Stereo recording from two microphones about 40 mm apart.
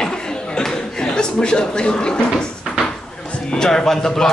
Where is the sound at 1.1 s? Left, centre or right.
Left.